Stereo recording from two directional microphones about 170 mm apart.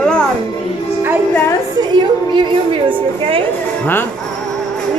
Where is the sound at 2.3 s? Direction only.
30° right (ahead or behind).